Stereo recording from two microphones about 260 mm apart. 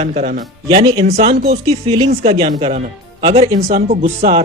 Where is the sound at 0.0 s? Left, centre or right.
Right.